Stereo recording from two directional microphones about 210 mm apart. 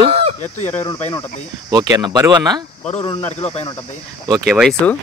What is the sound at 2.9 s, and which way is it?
Speech, 25° left (ahead or behind).